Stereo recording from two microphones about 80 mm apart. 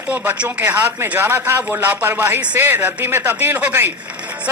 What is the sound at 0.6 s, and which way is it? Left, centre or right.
Speech, right.